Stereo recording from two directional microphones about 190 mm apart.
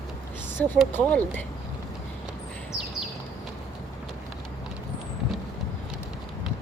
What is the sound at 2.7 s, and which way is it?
Bird, 5° right (ahead or behind).